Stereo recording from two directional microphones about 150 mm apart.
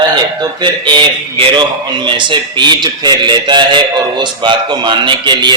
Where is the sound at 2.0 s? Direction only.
30° right (ahead or behind).